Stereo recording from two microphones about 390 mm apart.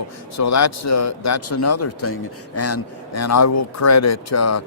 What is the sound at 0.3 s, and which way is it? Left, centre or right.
A man's voice, left.